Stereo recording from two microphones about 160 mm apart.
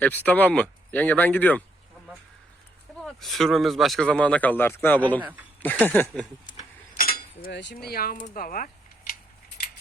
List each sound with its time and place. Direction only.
0.0 s speech: 10° left (ahead or behind)
3.0 s speech: centre (ahead or behind)
6.9 s a sound: 65° left (ahead or behind)